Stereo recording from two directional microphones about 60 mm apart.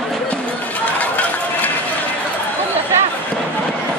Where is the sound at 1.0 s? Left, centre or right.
Left.